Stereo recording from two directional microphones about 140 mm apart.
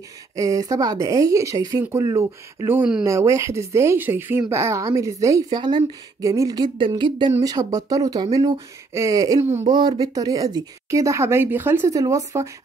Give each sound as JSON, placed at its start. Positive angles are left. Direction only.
{"t": 0.4, "sound": "speech", "side_deg": -25}